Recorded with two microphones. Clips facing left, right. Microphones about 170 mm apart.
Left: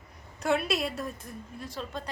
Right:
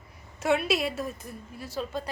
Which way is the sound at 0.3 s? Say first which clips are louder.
Right 2 dB; centre (ahead or behind).